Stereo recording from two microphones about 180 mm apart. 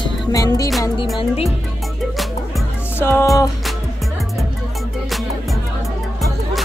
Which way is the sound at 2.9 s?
15° left (ahead or behind).